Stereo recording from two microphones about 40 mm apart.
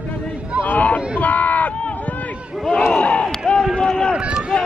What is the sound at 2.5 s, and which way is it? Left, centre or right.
Speech, centre.